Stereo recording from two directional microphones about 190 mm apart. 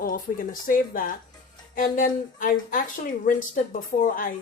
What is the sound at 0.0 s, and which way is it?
A woman's voice, 45° left (ahead or behind).